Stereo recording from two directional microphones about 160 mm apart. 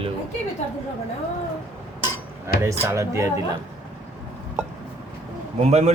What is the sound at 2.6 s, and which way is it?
Speech, 20° right (ahead or behind).